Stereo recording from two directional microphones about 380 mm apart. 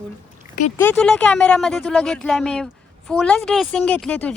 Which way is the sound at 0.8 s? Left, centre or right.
Centre.